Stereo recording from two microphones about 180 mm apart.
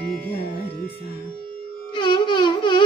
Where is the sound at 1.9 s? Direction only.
25° left (ahead or behind).